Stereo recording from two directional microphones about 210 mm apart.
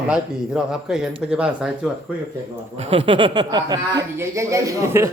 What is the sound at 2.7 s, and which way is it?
Speech, 30° right (ahead or behind).